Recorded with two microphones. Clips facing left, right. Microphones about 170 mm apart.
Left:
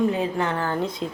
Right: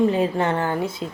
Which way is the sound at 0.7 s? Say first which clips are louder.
Even; 5° right (ahead or behind).